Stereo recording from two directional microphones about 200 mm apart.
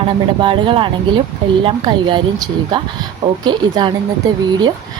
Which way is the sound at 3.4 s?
20° right (ahead or behind).